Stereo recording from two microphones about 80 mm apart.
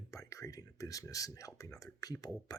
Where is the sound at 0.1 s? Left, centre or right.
Left.